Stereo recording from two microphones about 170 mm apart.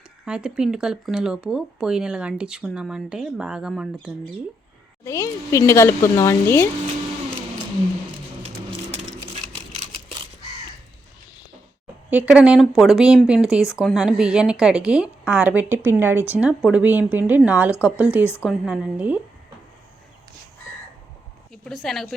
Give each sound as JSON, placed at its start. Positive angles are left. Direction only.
{"t": 0.3, "sound": "speech", "side_deg": -5}
{"t": 5.0, "sound": "speech", "side_deg": 15}
{"t": 12.1, "sound": "speech", "side_deg": -10}
{"t": 21.5, "sound": "a woman's voice", "side_deg": 0}